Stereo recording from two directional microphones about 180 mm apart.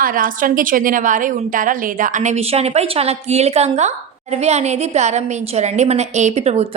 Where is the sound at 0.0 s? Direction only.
50° right (ahead or behind).